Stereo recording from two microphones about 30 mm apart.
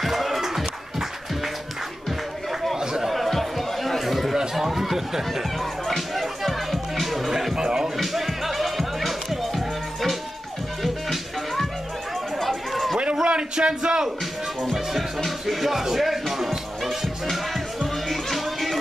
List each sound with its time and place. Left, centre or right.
0.0 s music: centre
2.8 s chatter: right
3.1 s chatter: centre
4.6 s a sound: centre
5.9 s music: centre
7.5 s music: right
8.0 s music: centre
10.8 s music: centre
12.4 s chatter: centre
13.2 s a sound: right
14.6 s speech: centre
15.2 s music: centre